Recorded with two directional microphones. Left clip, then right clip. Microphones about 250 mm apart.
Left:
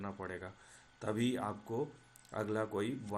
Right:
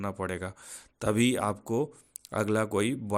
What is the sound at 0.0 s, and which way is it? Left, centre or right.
Speech, right.